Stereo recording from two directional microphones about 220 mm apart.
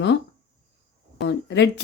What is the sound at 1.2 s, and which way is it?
Speech, 50° left (ahead or behind).